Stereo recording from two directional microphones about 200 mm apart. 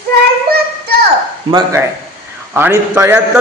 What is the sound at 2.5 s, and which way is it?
Speech, 10° right (ahead or behind).